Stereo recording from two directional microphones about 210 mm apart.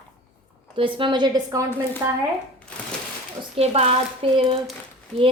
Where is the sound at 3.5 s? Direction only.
30° right (ahead or behind).